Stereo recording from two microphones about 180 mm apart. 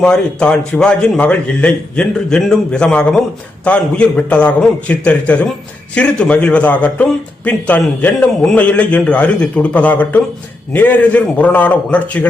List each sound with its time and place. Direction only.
0.0 s a man's voice: 5° left (ahead or behind)